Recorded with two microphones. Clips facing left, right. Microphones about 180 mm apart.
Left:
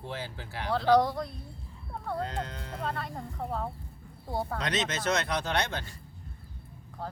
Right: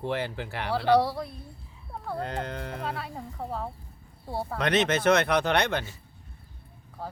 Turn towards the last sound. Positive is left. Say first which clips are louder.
# right 6 dB
turn(degrees=-65)  # may be behind; listen again after turning